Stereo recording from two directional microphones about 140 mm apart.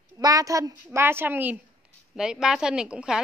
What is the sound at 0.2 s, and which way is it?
A woman's voice, 25° right (ahead or behind).